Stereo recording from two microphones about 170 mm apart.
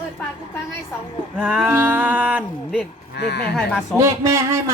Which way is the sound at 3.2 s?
75° left (ahead or behind).